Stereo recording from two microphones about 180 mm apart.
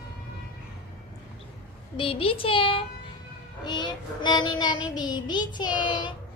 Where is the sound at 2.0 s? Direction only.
30° left (ahead or behind).